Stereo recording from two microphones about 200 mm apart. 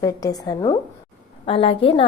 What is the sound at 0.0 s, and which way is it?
A woman's voice, 20° left (ahead or behind).